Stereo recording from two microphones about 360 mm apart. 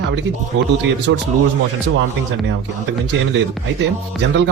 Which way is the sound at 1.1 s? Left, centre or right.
Right.